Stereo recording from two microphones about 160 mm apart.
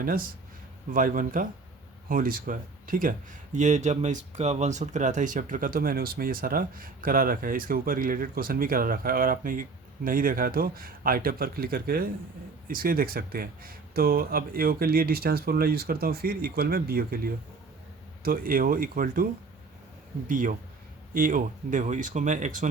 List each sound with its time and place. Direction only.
0.0 s speech: 65° right (ahead or behind)